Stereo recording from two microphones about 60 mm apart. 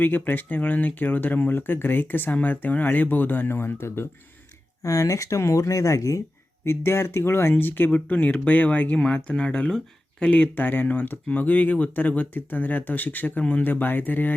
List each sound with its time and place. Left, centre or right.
0.0 s speech: left
4.8 s speech: left
6.7 s speech: left
7.9 s speech: left
10.5 s speech: left